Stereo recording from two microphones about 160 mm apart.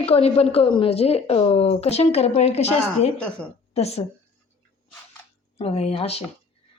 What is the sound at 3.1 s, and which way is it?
Speech, 5° left (ahead or behind).